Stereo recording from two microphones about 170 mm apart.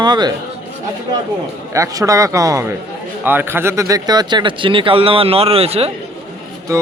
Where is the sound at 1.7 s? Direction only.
20° right (ahead or behind); by 5.9 s 35° right (ahead or behind).